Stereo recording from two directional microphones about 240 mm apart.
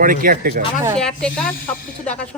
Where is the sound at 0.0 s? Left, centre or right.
Right.